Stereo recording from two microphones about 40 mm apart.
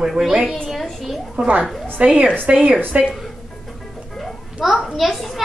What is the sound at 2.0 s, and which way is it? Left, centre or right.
Speech, right.